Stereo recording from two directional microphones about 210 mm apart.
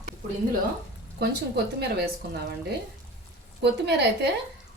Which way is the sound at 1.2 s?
50° right (ahead or behind).